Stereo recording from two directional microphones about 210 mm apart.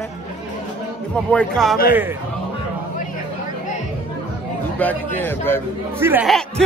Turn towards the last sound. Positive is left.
turn(degrees=-10)  # may be behind; listen again after turning